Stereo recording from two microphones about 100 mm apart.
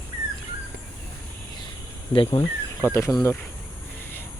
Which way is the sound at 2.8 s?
25° left (ahead or behind).